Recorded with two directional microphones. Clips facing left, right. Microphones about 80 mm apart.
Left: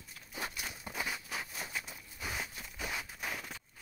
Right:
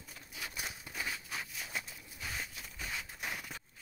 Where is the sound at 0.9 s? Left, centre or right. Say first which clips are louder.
Left 2 dB; centre.